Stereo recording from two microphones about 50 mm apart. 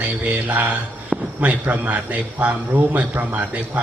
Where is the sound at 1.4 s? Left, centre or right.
Right.